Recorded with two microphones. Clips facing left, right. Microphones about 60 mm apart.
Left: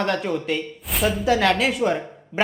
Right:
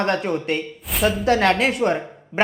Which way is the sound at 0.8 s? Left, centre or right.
Centre.